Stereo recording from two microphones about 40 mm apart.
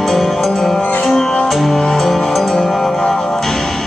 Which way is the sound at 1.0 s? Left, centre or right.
Centre.